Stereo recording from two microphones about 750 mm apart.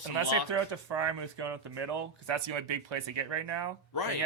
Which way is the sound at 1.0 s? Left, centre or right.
Right.